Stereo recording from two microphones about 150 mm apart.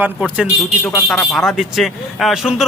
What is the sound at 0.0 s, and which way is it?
Speech, 5° right (ahead or behind).